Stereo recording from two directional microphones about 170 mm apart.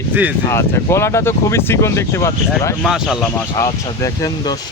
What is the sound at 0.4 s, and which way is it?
Speech, 15° left (ahead or behind).